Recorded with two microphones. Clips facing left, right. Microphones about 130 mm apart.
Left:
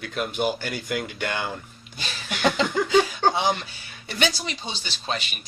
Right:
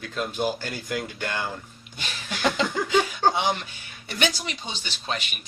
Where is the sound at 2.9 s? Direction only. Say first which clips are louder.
Left 1 dB; 30° left (ahead or behind).